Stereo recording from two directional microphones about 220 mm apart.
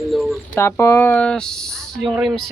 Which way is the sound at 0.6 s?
10° left (ahead or behind).